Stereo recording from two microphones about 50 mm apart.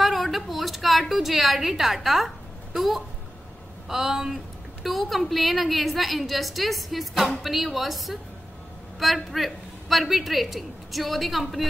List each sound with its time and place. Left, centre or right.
0.0 s a sound: centre
3.9 s speech: centre
4.8 s a woman's voice: centre